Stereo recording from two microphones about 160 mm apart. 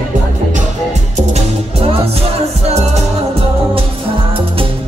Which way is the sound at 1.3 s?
40° right (ahead or behind).